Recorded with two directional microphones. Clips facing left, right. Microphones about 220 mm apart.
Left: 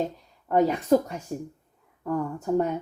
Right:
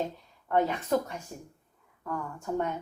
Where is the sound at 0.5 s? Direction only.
40° left (ahead or behind).